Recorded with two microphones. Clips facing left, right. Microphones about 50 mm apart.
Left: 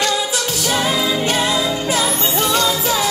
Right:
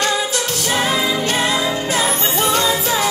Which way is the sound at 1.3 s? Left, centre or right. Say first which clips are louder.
Even; right.